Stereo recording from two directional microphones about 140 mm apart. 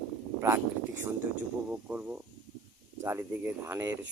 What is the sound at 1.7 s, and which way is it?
Speech, 10° right (ahead or behind).